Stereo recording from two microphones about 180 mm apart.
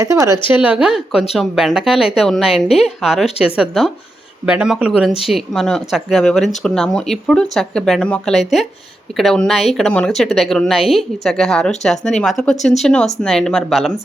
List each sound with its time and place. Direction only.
0.0 s speech: 15° right (ahead or behind); by 13.9 s centre (ahead or behind)